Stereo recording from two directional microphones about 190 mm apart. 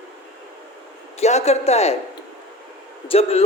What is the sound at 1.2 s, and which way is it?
Speech, 35° left (ahead or behind).